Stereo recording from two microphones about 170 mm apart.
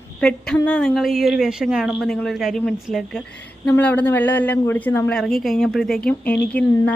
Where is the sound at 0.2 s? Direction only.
5° left (ahead or behind).